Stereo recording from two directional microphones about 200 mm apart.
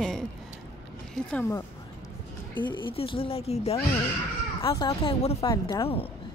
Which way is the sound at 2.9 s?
25° left (ahead or behind).